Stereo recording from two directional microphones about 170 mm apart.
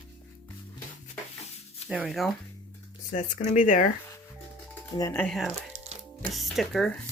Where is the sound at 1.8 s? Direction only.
5° right (ahead or behind).